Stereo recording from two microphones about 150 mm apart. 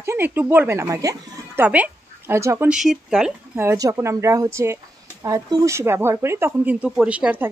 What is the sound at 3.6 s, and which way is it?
A woman's voice, 20° right (ahead or behind).